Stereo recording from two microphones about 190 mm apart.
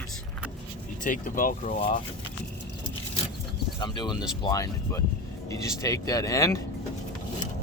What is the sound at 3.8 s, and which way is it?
Speech, 25° left (ahead or behind).